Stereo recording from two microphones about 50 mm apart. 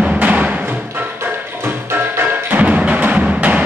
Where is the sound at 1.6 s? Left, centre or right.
Right.